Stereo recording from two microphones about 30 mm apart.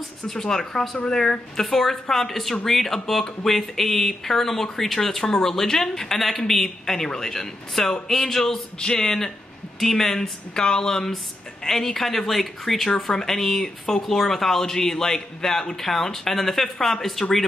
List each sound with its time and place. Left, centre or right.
0.3 s speech: centre
1.6 s speech: centre
8.7 s speech: left
10.5 s speech: left
11.6 s speech: centre
12.9 s speech: centre